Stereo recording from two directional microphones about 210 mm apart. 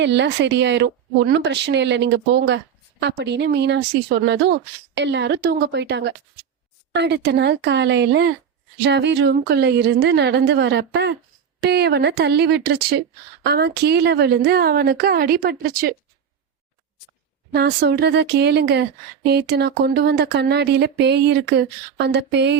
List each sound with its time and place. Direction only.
0.0 s speech: 55° right (ahead or behind)
17.5 s speech: 50° right (ahead or behind)